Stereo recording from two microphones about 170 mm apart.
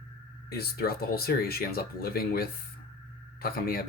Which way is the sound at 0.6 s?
65° left (ahead or behind).